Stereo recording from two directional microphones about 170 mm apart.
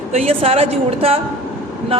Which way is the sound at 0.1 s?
35° right (ahead or behind).